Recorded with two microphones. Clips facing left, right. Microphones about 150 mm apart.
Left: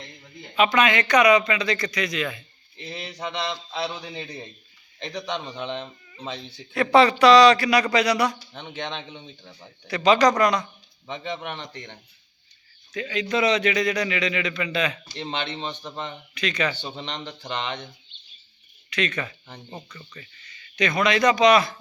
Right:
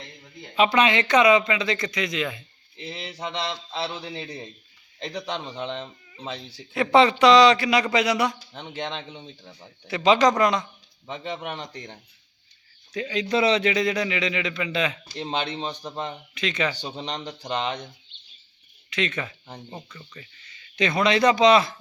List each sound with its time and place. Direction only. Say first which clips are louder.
0.5 s a man's voice: even; 30° right (ahead or behind)
2.8 s a man's voice: even; centre (ahead or behind)
6.7 s a man's voice: left 1 dB; 20° right (ahead or behind)
8.8 s a man's voice: right 1 dB; centre (ahead or behind)
9.8 s speech: even; 20° right (ahead or behind)
11.1 s a man's voice: even; 5° right (ahead or behind)
12.9 s a man's voice: right 1 dB; 35° right (ahead or behind)
15.3 s speech: right 2 dB; 40° right (ahead or behind)
16.3 s a man's voice: left 1 dB; 25° right (ahead or behind)
17.2 s a man's voice: right 5 dB; 10° right (ahead or behind)
18.9 s a man's voice: left 1 dB; 25° right (ahead or behind)
19.7 s speech: even; 5° right (ahead or behind)
20.4 s speech: even; 25° right (ahead or behind)